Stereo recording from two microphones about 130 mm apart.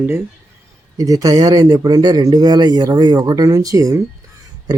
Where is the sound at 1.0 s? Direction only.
30° right (ahead or behind).